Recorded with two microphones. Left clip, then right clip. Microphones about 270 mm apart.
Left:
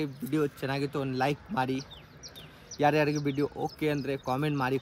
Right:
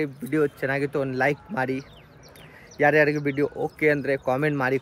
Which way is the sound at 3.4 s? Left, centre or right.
Centre.